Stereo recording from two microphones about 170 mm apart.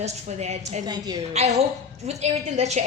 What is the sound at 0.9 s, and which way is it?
Speech, 25° right (ahead or behind).